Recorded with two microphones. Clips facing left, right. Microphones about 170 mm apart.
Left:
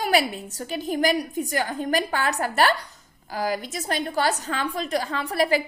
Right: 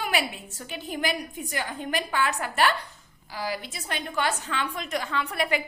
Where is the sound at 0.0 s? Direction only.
40° left (ahead or behind).